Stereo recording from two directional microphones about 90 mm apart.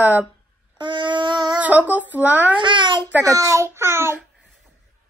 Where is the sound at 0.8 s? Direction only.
65° right (ahead or behind).